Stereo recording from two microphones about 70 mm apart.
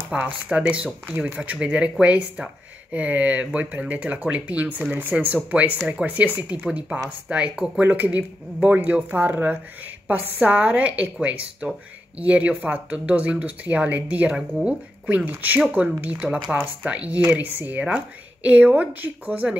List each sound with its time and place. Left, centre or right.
0.1 s speech: centre